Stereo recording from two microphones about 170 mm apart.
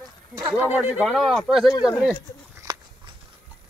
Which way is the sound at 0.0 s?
20° right (ahead or behind).